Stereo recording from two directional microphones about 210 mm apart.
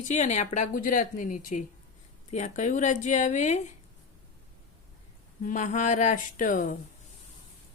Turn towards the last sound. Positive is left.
turn(degrees=40)  # may be behind; listen again after turning